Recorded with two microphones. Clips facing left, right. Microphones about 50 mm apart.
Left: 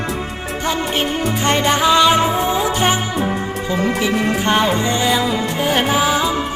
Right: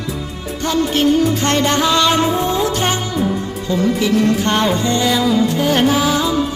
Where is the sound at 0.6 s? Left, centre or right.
Centre.